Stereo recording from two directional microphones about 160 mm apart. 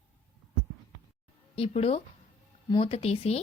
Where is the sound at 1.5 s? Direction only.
40° left (ahead or behind).